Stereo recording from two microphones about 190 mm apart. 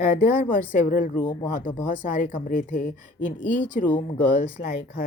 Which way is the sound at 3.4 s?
70° left (ahead or behind).